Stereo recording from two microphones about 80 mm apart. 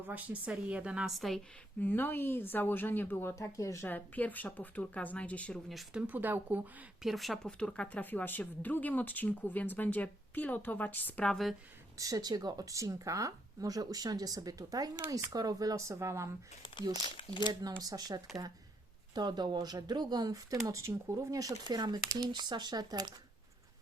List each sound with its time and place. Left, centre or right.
0.1 s a woman's voice: centre
1.8 s speech: left
3.3 s speech: left
3.8 s speech: left
5.9 s speech: centre
7.0 s speech: centre
7.4 s speech: centre
11.3 s speech: centre
11.9 s speech: right
15.9 s speech: right
17.0 s speech: left
17.5 s speech: right
21.7 s speech: right